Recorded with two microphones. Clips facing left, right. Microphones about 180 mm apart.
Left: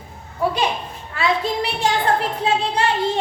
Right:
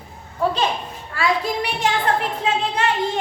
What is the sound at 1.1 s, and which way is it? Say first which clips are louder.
A woman's voice: left 1 dB; 25° left (ahead or behind).